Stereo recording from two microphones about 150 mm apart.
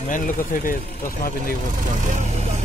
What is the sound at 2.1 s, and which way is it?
Speech, 50° right (ahead or behind).